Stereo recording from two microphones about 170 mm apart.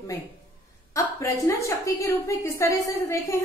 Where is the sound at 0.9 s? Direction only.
20° left (ahead or behind).